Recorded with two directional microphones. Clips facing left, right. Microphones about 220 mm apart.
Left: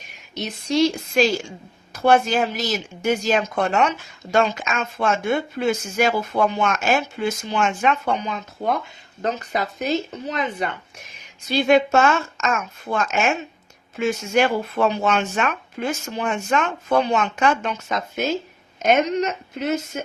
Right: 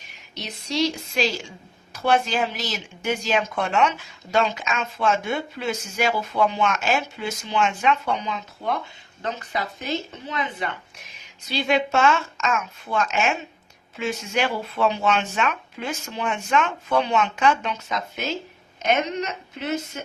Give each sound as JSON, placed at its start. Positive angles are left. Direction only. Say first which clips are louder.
{"t": 0.3, "sound": "a woman's voice", "louder": "left 5 dB", "side_deg": 50}